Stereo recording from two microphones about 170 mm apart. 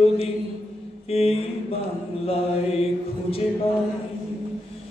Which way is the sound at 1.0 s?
35° left (ahead or behind).